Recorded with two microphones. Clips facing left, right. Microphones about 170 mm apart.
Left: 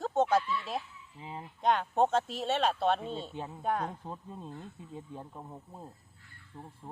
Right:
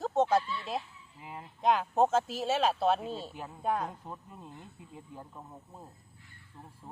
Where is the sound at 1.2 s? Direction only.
25° left (ahead or behind).